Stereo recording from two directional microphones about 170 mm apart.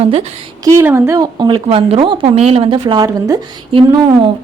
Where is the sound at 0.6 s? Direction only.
15° right (ahead or behind).